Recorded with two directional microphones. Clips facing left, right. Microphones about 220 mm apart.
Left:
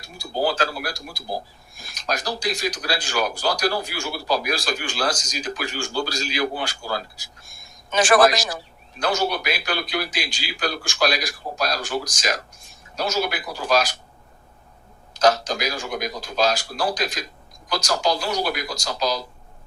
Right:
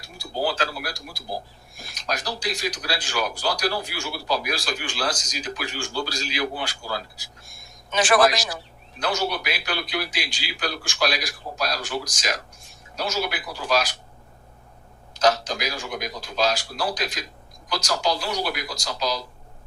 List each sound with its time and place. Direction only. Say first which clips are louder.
0.0 s speech: left 3 dB; 45° left (ahead or behind)
15.1 s speech: left 2 dB; 45° left (ahead or behind)